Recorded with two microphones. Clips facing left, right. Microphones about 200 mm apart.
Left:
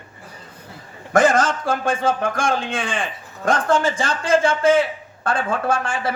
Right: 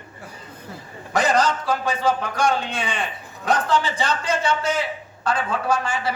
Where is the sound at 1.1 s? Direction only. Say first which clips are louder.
Left 3 dB; 50° left (ahead or behind).